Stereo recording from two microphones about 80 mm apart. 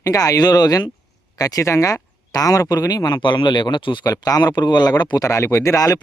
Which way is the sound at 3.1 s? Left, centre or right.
Left.